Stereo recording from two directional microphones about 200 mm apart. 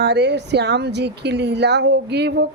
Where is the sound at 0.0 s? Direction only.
55° right (ahead or behind).